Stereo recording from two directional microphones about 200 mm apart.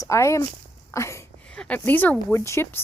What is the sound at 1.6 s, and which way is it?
Speech, 5° left (ahead or behind).